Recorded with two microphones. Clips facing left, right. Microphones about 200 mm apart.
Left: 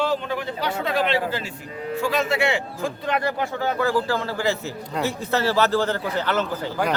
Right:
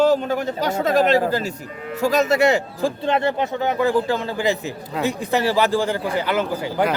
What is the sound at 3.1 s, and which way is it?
A man's voice, 25° right (ahead or behind).